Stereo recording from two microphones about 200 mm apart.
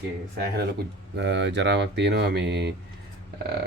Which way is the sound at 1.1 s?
60° right (ahead or behind).